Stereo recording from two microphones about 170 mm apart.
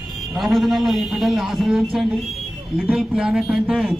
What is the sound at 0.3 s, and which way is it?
A man's voice, centre (ahead or behind).